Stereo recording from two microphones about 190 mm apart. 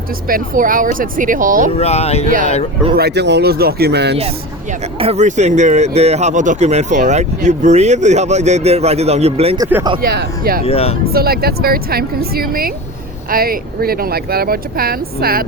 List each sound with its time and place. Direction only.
0.3 s speech: 45° right (ahead or behind)
1.8 s speech: 35° left (ahead or behind)
2.2 s speech: 45° right (ahead or behind)
2.9 s speech: 60° right (ahead or behind)
4.9 s speech: 35° right (ahead or behind)
9.6 s speech: 10° right (ahead or behind)
10.0 s speech: 55° right (ahead or behind)
10.7 s speech: 30° left (ahead or behind)
11.0 s speech: 55° right (ahead or behind)